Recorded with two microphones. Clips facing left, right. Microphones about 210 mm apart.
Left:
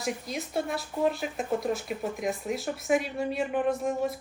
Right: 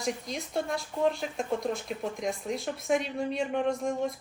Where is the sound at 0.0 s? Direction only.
5° left (ahead or behind).